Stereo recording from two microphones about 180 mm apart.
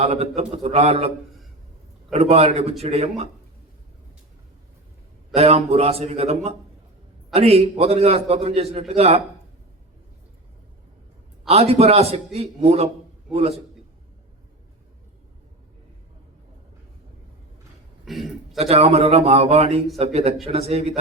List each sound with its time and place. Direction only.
0.0 s a man's voice: 35° right (ahead or behind)
2.1 s a man's voice: 35° right (ahead or behind)
5.3 s a man's voice: 35° right (ahead or behind)
11.4 s a man's voice: 35° right (ahead or behind)
18.0 s burping: centre (ahead or behind)
18.6 s a man's voice: 35° right (ahead or behind)